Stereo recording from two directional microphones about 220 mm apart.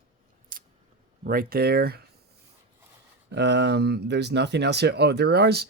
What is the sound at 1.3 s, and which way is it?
Speech, 40° right (ahead or behind).